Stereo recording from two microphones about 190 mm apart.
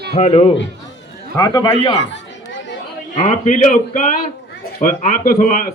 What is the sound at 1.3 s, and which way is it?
Speech, 20° left (ahead or behind).